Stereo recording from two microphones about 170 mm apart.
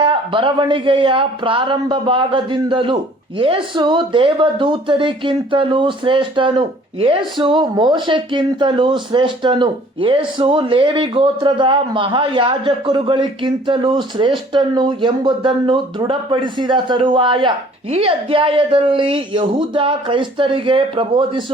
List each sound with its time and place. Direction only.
0.0 s a woman's voice: 30° right (ahead or behind)